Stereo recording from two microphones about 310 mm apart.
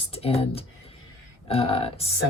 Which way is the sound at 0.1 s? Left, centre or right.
Centre.